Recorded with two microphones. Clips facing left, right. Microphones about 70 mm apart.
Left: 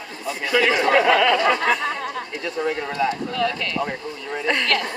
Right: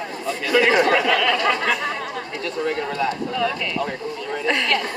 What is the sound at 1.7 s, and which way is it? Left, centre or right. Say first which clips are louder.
Chatter: left 1 dB; centre.